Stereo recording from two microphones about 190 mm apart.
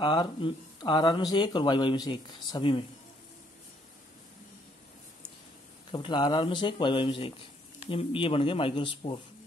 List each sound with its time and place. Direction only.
0.0 s speech: 25° left (ahead or behind)
5.9 s speech: 25° left (ahead or behind)